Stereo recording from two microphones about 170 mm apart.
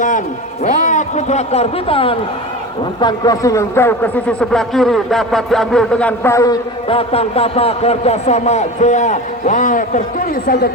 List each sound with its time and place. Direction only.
0.6 s a man's voice: 45° left (ahead or behind); by 6.6 s 20° left (ahead or behind)
6.8 s a man's voice: 35° left (ahead or behind); by 10.7 s 60° left (ahead or behind)